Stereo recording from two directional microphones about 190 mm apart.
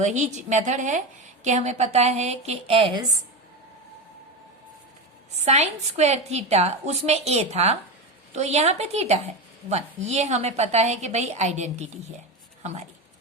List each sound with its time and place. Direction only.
0.0 s a woman's voice: 40° right (ahead or behind); by 3.2 s 20° right (ahead or behind)
5.5 s a woman's voice: 35° right (ahead or behind)